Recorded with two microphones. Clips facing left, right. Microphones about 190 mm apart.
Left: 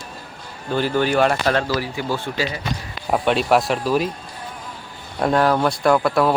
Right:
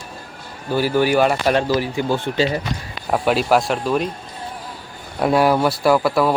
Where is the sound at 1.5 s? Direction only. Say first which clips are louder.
Right 3 dB; 15° right (ahead or behind).